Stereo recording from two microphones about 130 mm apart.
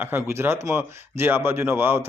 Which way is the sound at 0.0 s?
15° right (ahead or behind).